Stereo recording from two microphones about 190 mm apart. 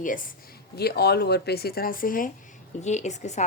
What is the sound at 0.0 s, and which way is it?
Speech, 45° left (ahead or behind).